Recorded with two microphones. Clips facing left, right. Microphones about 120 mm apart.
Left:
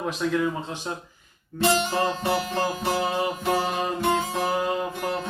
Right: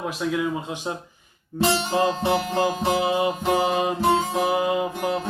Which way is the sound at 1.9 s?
20° right (ahead or behind).